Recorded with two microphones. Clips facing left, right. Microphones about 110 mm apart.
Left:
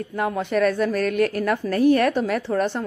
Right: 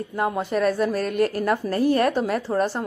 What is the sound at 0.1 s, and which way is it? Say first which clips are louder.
A woman's voice: left 1 dB; 10° right (ahead or behind).